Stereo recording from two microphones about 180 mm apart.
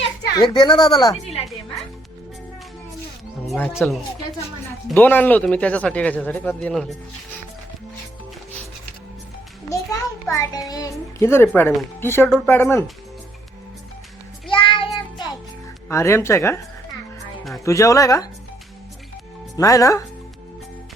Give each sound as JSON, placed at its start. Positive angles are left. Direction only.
{"t": 0.3, "sound": "speech", "side_deg": 25}
{"t": 3.4, "sound": "speech", "side_deg": 0}
{"t": 4.9, "sound": "speech", "side_deg": 10}
{"t": 9.6, "sound": "a child's voice", "side_deg": 15}
{"t": 14.5, "sound": "child singing", "side_deg": 30}
{"t": 15.9, "sound": "speech", "side_deg": 15}
{"t": 17.7, "sound": "speech", "side_deg": 20}
{"t": 19.5, "sound": "speech", "side_deg": 20}